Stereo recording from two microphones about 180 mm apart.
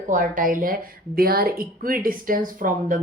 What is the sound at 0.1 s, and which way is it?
A woman's voice, 45° right (ahead or behind).